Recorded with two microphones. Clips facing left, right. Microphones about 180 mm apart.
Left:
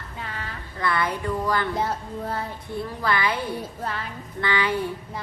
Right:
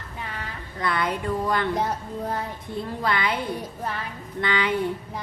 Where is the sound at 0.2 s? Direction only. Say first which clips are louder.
Even; 15° right (ahead or behind).